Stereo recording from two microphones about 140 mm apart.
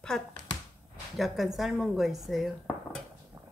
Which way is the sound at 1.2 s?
Centre (ahead or behind).